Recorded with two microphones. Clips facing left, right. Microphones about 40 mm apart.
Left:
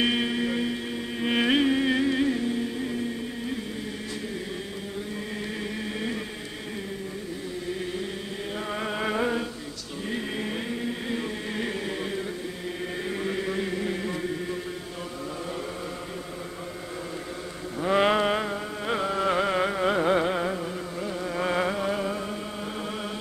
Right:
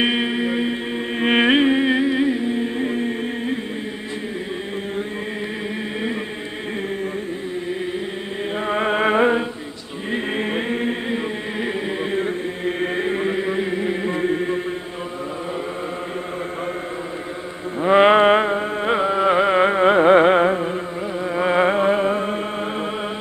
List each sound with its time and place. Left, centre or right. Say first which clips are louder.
0.0 s music: right 5 dB; right
8.6 s music: right 11 dB; right
11.1 s chant: right 6 dB; right
17.7 s music: right 9 dB; right